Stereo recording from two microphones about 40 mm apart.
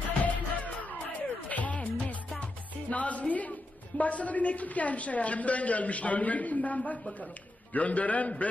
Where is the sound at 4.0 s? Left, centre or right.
Left.